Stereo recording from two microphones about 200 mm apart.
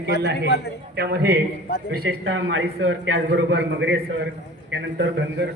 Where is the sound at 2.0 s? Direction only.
70° right (ahead or behind).